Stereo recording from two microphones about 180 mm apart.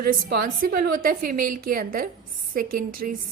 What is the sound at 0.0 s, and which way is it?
A woman's voice, 55° right (ahead or behind).